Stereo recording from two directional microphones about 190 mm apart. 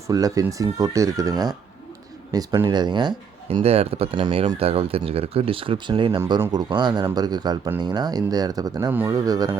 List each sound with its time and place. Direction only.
0.1 s speech: 15° right (ahead or behind)